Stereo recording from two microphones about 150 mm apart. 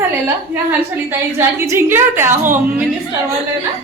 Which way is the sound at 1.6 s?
15° right (ahead or behind).